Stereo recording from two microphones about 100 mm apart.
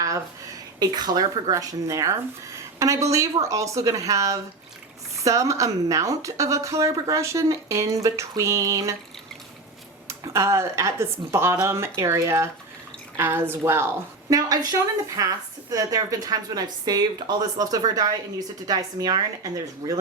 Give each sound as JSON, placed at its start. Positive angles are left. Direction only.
{"t": 0.8, "sound": "a woman's voice", "side_deg": -45}
{"t": 10.1, "sound": "speech", "side_deg": -30}
{"t": 14.3, "sound": "a woman's voice", "side_deg": -40}